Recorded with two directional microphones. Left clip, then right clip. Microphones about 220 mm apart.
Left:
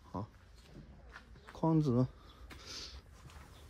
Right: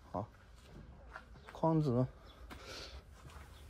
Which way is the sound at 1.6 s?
30° left (ahead or behind).